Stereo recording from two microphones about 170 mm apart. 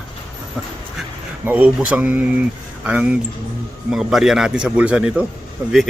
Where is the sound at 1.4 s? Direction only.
10° right (ahead or behind).